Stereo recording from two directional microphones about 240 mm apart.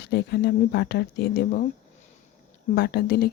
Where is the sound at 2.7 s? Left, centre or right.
Left.